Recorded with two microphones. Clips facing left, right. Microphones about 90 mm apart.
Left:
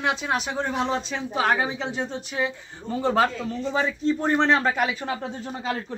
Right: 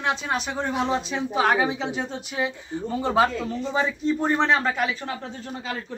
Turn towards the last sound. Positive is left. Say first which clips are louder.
# left 3 dB
turn(degrees=20)  # may be behind; listen again after turning